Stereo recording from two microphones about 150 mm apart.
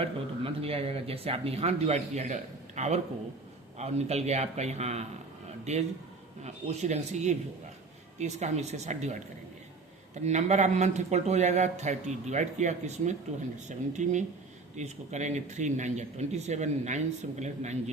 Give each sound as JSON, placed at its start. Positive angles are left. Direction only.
{"t": 0.0, "sound": "speech", "side_deg": -40}
{"t": 10.2, "sound": "speech", "side_deg": -50}